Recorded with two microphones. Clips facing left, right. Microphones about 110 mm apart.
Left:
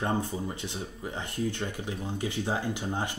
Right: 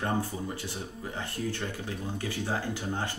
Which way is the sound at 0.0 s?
20° left (ahead or behind).